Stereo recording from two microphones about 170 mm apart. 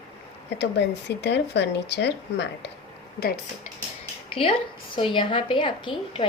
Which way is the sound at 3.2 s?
60° left (ahead or behind).